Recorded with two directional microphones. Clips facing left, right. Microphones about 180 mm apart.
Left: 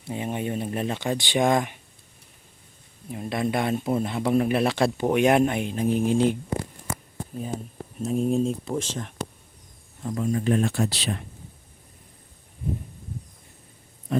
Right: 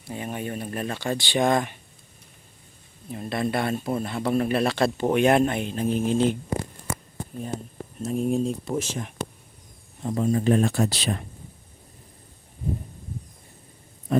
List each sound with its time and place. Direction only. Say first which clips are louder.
0.0 s speech: left 3 dB; 20° left (ahead or behind)
3.1 s speech: even; 15° left (ahead or behind)
7.9 s speech: left 1 dB; centre (ahead or behind)
10.0 s speech: right 3 dB; 30° right (ahead or behind)